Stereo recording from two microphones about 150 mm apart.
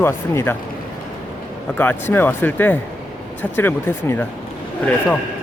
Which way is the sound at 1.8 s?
15° left (ahead or behind).